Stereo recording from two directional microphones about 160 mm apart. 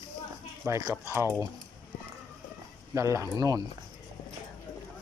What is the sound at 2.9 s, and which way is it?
Speech, 20° right (ahead or behind).